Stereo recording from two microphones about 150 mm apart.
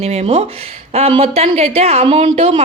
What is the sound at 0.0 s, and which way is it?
A woman's voice, 45° right (ahead or behind).